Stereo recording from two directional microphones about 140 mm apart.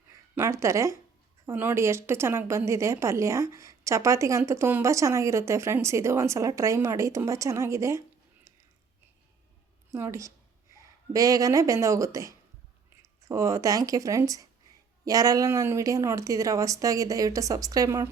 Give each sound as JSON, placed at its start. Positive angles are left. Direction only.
{"t": 0.1, "sound": "a woman's voice", "side_deg": -20}
{"t": 9.9, "sound": "a woman's voice", "side_deg": -20}